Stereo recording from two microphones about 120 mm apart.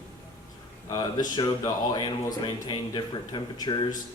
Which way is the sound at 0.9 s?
35° left (ahead or behind).